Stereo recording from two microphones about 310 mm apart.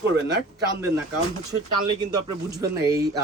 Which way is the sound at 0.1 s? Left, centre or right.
Right.